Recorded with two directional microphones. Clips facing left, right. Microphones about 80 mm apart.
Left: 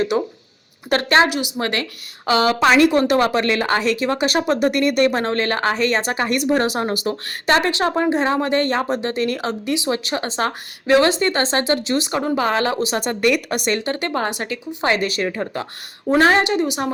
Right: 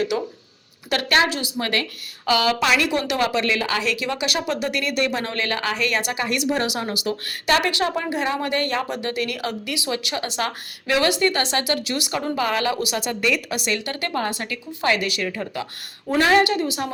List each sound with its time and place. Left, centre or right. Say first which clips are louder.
0.1 s a woman's voice: left 4 dB; left
13.2 s a woman's voice: left 6 dB; left